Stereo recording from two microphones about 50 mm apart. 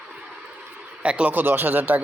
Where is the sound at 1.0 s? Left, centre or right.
Right.